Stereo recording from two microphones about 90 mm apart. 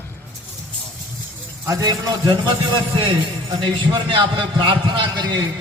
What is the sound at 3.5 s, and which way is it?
A man's voice, 60° right (ahead or behind).